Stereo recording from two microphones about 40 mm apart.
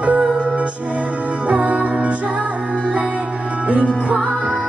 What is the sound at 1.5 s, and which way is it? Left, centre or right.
Music, right.